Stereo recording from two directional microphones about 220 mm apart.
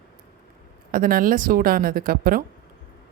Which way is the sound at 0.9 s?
40° right (ahead or behind).